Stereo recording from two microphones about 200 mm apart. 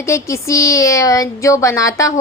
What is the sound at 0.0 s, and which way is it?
Speech, 15° left (ahead or behind).